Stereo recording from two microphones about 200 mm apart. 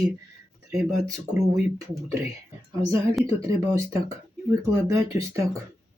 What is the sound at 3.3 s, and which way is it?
Speech, 15° right (ahead or behind).